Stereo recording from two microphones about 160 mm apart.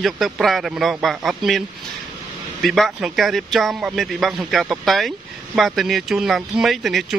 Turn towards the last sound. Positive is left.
turn(degrees=0)  # may be behind; listen again after turning